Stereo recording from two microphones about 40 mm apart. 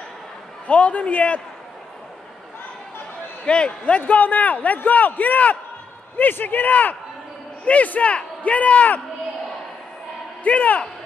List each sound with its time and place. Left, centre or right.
0.7 s a man's voice: left
3.4 s a man's voice: left
10.4 s a man's voice: left